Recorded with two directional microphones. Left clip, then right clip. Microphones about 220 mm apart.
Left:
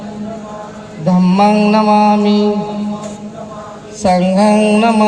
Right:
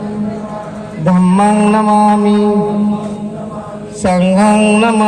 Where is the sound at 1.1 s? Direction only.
40° right (ahead or behind).